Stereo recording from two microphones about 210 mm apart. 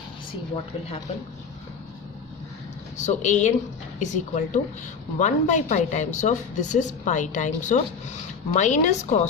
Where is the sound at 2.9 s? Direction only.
35° left (ahead or behind).